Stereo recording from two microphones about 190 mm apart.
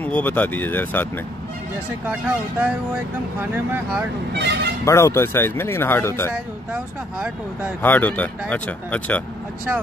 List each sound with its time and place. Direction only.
0.0 s speech: 10° left (ahead or behind)
2.6 s speech: 10° right (ahead or behind)
4.3 s speech: 65° right (ahead or behind)
4.8 s speech: 15° left (ahead or behind)
6.3 s speech: 5° right (ahead or behind)
7.8 s speech: 10° left (ahead or behind)